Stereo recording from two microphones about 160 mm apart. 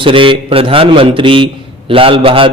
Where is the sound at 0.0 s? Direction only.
35° right (ahead or behind).